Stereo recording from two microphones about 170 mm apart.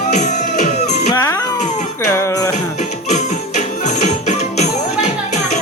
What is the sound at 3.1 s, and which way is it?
Music, 45° left (ahead or behind).